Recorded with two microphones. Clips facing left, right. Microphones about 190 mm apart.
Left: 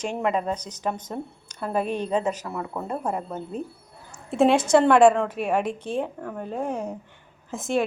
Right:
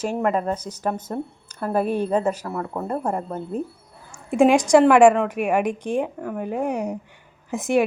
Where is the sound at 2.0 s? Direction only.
55° right (ahead or behind).